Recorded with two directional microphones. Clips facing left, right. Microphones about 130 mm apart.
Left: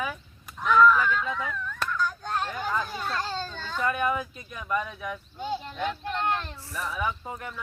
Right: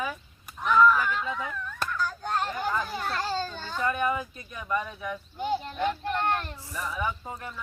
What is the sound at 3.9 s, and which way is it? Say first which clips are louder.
Speech: even; centre (ahead or behind).